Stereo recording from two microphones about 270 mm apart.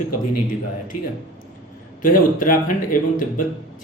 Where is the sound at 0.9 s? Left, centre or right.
Left.